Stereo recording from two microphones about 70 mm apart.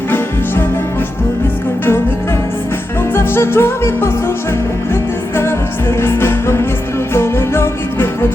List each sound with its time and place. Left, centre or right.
3.2 s music: left
6.0 s music: left